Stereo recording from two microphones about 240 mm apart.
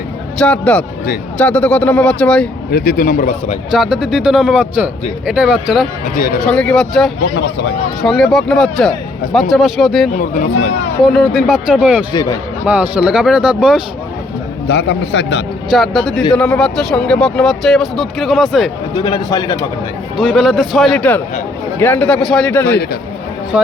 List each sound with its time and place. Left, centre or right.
0.3 s speech: centre
2.6 s a man's voice: left
3.7 s speech: centre
7.3 s a man's voice: left
8.0 s speech: centre
12.1 s a man's voice: centre
12.6 s speech: centre
14.7 s a man's voice: left
15.7 s speech: centre
18.9 s a man's voice: centre
20.1 s a man's voice: centre